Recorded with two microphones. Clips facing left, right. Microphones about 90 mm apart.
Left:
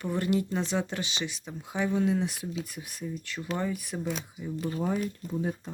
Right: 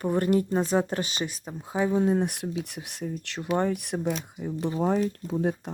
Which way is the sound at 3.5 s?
55° right (ahead or behind).